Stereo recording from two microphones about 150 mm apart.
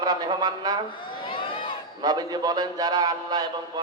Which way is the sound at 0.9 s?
30° left (ahead or behind).